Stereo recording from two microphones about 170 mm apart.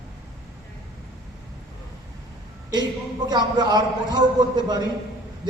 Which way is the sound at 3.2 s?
25° right (ahead or behind).